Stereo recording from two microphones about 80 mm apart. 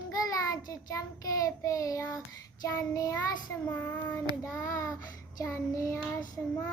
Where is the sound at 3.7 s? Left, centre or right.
Left.